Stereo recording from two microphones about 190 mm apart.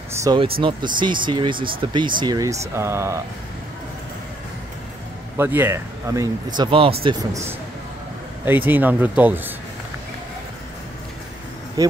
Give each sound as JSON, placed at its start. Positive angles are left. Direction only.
{"t": 0.2, "sound": "speech", "side_deg": -25}
{"t": 5.4, "sound": "speech", "side_deg": -10}
{"t": 8.5, "sound": "speech", "side_deg": -10}
{"t": 11.8, "sound": "speech", "side_deg": -20}